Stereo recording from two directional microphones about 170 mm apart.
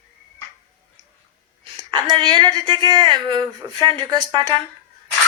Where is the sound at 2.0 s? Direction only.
25° right (ahead or behind).